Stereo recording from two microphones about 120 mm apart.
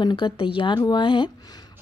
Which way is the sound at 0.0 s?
40° left (ahead or behind).